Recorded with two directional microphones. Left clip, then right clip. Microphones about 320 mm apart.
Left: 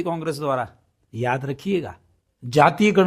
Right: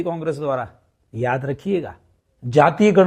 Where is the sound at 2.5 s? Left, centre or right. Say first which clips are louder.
Right 1 dB; centre.